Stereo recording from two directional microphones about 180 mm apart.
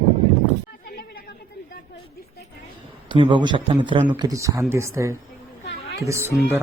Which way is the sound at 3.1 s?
25° right (ahead or behind).